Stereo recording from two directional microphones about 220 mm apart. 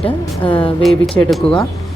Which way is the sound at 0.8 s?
Centre (ahead or behind).